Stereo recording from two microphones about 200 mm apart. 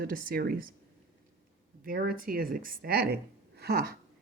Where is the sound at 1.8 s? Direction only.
45° right (ahead or behind).